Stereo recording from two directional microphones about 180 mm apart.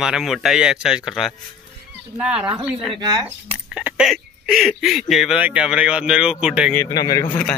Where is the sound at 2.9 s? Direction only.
20° right (ahead or behind).